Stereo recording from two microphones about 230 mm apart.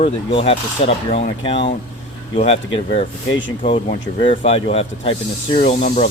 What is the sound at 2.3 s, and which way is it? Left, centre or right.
Speech, left.